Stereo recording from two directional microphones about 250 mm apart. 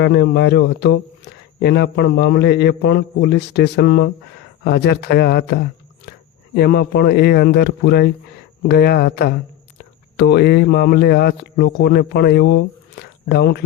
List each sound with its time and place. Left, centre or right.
0.0 s speech: left